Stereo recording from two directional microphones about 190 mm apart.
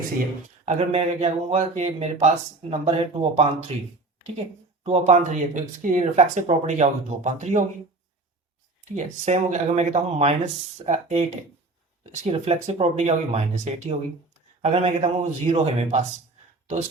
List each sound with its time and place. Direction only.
0.6 s speech: 35° right (ahead or behind)
4.8 s speech: 30° right (ahead or behind)
8.8 s speech: 40° right (ahead or behind)